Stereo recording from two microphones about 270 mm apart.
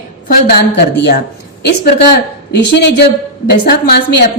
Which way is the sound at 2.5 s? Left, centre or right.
Left.